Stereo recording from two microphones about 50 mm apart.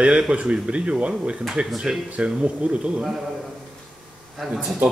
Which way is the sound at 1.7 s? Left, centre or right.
Centre.